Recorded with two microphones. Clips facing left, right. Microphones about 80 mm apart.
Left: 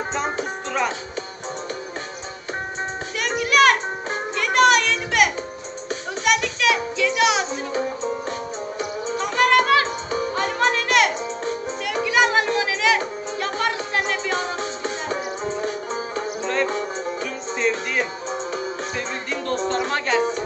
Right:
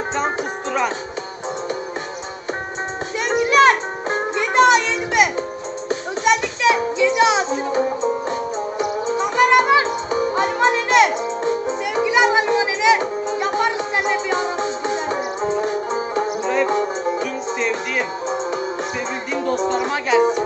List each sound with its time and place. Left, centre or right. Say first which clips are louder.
3.3 s music: right 3 dB; right
8.3 s music: right 5 dB; centre
9.0 s music: right 3 dB; right
17.2 s music: right 2 dB; centre